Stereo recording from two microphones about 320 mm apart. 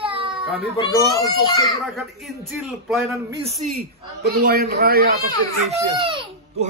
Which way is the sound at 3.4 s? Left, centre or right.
Right.